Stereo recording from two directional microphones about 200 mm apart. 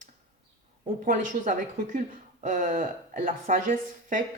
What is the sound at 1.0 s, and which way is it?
Speech, 40° right (ahead or behind).